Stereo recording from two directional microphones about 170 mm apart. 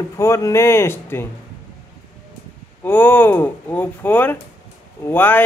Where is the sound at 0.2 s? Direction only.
15° left (ahead or behind).